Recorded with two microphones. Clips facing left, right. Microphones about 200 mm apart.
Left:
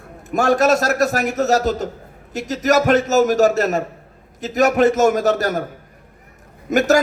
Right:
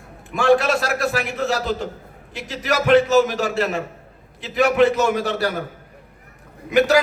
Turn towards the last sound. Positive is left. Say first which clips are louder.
# right 1 dB
turn(degrees=45)  # may be behind; listen again after turning